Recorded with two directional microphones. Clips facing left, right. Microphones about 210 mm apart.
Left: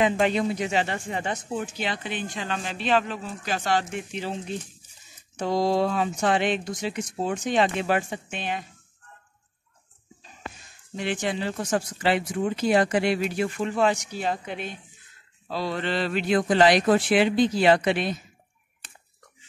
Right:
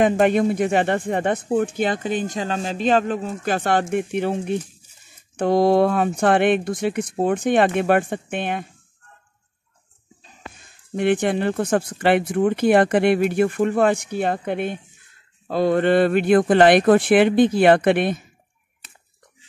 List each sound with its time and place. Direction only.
0.0 s speech: 50° right (ahead or behind)
11.0 s speech: 55° right (ahead or behind)